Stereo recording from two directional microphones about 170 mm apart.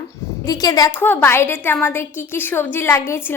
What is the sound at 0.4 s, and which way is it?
Speech, 20° left (ahead or behind).